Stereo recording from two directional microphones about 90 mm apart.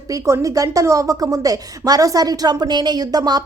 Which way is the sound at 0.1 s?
40° right (ahead or behind).